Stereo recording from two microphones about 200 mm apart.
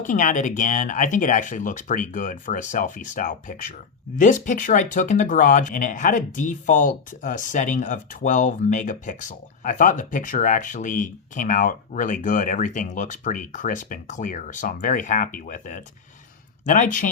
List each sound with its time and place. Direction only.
0.0 s speech: 40° left (ahead or behind)